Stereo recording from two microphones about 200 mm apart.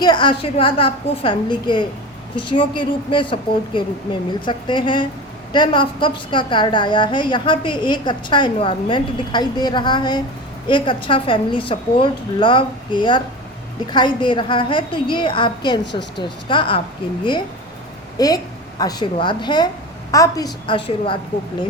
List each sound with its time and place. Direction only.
0.0 s a woman's voice: 20° left (ahead or behind)
18.2 s a woman's voice: 20° left (ahead or behind)